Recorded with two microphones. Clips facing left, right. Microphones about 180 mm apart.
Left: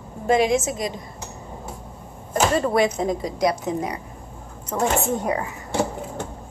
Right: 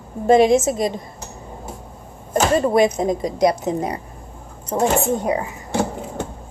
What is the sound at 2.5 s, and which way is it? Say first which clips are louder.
A woman's voice: right 6 dB; 20° right (ahead or behind).